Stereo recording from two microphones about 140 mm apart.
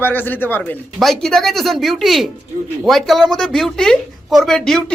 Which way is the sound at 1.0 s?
Centre (ahead or behind).